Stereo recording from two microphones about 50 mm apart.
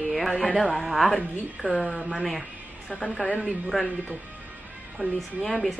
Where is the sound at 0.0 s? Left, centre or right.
Centre.